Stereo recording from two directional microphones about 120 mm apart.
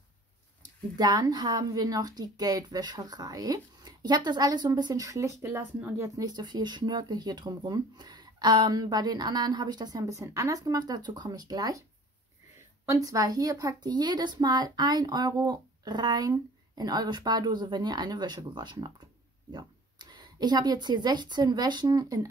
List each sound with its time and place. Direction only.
0.9 s a woman's voice: 35° right (ahead or behind)
12.8 s a woman's voice: 25° right (ahead or behind)